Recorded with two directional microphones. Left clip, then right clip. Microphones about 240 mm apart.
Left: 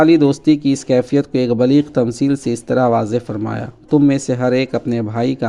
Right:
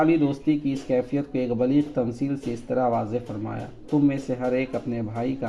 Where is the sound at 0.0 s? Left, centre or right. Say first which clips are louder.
Left 10 dB; left.